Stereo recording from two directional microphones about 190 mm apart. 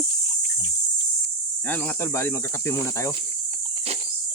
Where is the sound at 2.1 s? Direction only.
15° left (ahead or behind).